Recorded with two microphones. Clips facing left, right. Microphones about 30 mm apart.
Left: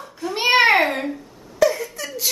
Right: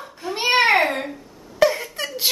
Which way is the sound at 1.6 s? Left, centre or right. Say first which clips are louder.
Even; right.